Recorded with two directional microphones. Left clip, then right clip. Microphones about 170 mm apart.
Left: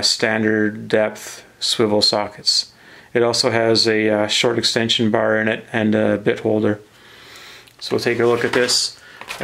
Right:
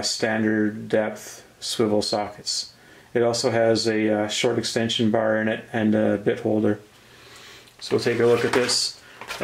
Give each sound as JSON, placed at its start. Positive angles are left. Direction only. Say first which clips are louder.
{"t": 0.0, "sound": "speech", "louder": "left 6 dB", "side_deg": 30}
{"t": 7.8, "sound": "speech", "louder": "left 3 dB", "side_deg": 25}